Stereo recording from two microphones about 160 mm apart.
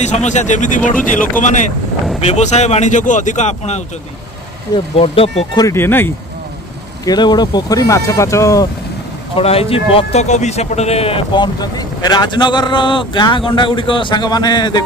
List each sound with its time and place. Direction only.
0.0 s speech: 45° left (ahead or behind)
4.9 s speech: 35° left (ahead or behind)
5.6 s speech: 15° left (ahead or behind)
7.1 s speech: 25° left (ahead or behind)
9.4 s speech: 40° left (ahead or behind)